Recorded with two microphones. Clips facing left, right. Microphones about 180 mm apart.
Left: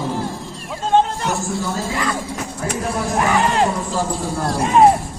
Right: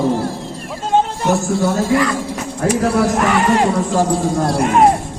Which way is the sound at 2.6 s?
75° right (ahead or behind).